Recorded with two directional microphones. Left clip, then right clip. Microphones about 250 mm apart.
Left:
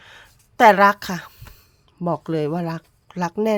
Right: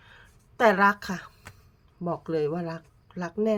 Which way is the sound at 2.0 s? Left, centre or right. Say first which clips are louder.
Left 5 dB; left.